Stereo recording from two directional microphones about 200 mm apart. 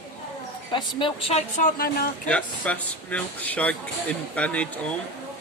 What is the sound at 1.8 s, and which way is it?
Speech, 50° left (ahead or behind).